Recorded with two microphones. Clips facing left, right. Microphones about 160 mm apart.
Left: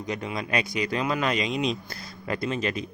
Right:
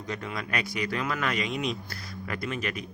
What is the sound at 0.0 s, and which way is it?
Speech, 15° left (ahead or behind).